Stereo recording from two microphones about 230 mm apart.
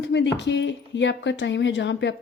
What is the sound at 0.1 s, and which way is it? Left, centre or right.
Speech, left.